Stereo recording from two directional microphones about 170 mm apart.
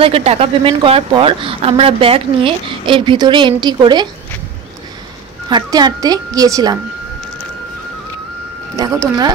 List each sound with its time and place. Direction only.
0.0 s a woman's voice: 35° right (ahead or behind)
5.5 s speech: 25° right (ahead or behind)
8.7 s speech: 20° right (ahead or behind)